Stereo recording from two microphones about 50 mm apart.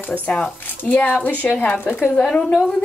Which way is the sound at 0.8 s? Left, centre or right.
Left.